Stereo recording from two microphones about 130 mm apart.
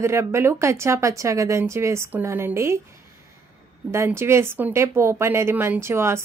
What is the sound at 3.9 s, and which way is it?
Speech, 20° right (ahead or behind).